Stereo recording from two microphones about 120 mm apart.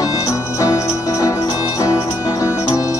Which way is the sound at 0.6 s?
30° left (ahead or behind).